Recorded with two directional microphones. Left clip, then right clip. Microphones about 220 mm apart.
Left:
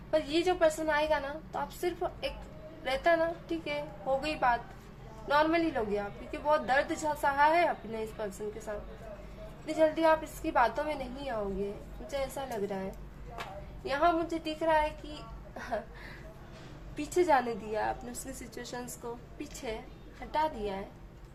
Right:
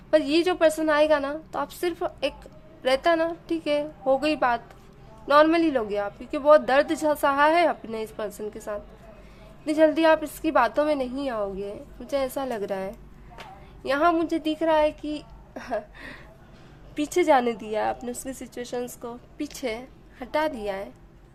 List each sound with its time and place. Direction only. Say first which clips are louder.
0.1 s a woman's voice: right 8 dB; 50° right (ahead or behind)
16.9 s a woman's voice: right 6 dB; 45° right (ahead or behind)